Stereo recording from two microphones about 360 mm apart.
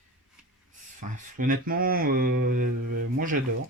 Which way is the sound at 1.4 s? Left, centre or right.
Right.